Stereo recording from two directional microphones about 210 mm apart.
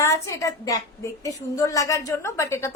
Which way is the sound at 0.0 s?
15° left (ahead or behind).